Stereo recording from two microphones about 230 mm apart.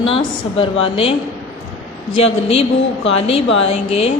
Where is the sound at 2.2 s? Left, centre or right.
Left.